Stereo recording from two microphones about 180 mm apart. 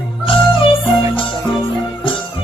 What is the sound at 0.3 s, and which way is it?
Music, 30° left (ahead or behind).